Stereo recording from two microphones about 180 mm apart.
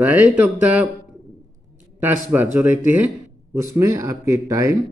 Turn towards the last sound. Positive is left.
turn(degrees=-15)  # may be behind; listen again after turning